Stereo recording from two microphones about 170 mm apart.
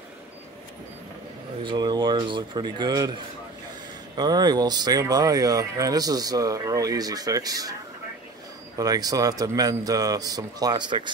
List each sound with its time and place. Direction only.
1.6 s speech: 25° right (ahead or behind)
4.2 s speech: 25° right (ahead or behind)
8.7 s speech: 20° right (ahead or behind)